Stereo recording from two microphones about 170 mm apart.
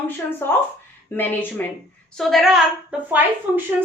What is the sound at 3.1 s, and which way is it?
Speech, 10° right (ahead or behind).